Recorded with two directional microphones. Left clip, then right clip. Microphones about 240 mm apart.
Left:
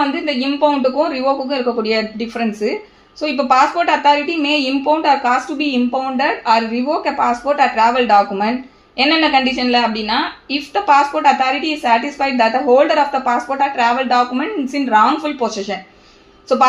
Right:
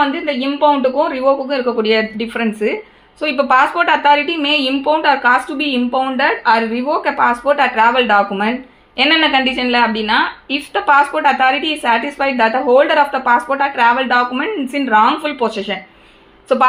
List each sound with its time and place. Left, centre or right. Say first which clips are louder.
0.1 s a woman's voice: even; right